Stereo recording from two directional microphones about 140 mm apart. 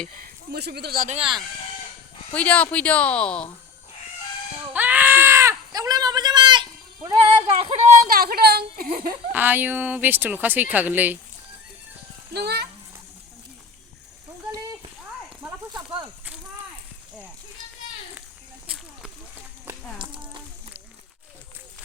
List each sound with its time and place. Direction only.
0.9 s a woman's voice: 90° right
1.1 s speech: 40° right (ahead or behind)
2.3 s speech: 10° left (ahead or behind)
4.7 s a sound: 10° right (ahead or behind); by 7.7 s 30° right (ahead or behind)
8.1 s a woman's voice: 90° right
9.3 s speech: 15° right (ahead or behind)